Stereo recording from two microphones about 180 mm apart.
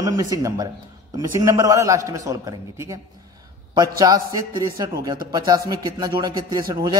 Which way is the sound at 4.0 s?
20° right (ahead or behind).